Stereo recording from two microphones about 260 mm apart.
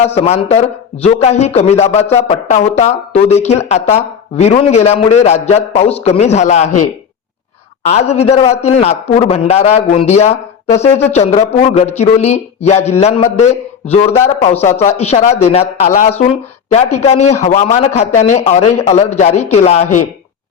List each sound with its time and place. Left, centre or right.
0.0 s speech: left
7.9 s speech: left